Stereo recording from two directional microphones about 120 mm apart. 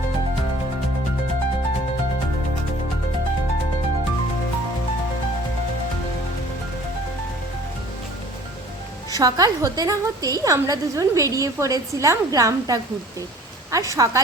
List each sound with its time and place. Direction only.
9.1 s a woman's voice: 30° right (ahead or behind)